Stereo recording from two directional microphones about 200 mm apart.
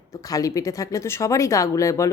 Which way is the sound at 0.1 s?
15° left (ahead or behind).